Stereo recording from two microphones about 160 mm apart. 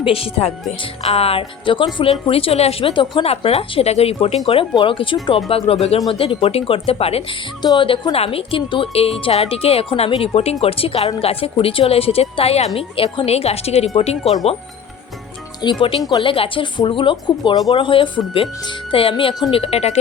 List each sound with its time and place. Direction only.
0.0 s a woman's voice: 35° left (ahead or behind)
15.6 s a woman's voice: 25° left (ahead or behind)
19.5 s a woman's voice: 40° left (ahead or behind)